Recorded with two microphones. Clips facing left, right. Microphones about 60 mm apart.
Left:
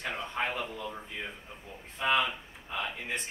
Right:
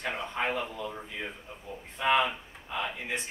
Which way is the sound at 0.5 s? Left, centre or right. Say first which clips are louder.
Right 2 dB; centre.